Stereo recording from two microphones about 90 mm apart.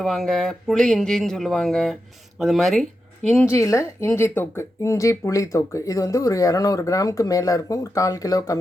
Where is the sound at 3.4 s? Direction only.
35° left (ahead or behind).